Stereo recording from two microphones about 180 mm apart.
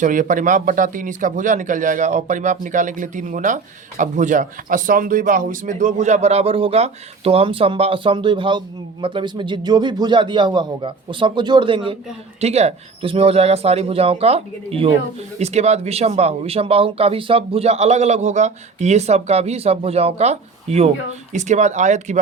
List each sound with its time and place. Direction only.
0.0 s speech: 45° right (ahead or behind)